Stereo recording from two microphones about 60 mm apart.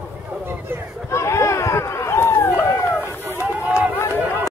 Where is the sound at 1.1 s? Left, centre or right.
Left.